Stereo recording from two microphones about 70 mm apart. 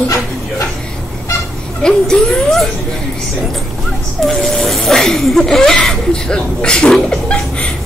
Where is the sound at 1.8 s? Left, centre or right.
Centre.